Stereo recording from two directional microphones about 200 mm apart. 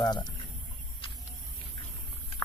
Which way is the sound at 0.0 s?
20° left (ahead or behind).